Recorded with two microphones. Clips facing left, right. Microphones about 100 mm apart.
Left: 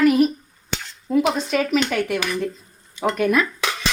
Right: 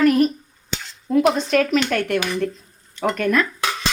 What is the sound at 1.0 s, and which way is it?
Speech, centre (ahead or behind).